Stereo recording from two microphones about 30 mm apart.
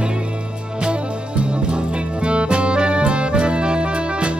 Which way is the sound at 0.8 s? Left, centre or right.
Right.